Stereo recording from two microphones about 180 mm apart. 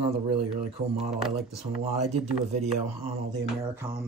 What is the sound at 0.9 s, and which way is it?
Speech, centre (ahead or behind).